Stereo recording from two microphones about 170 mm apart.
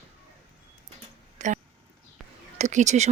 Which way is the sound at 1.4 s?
45° right (ahead or behind).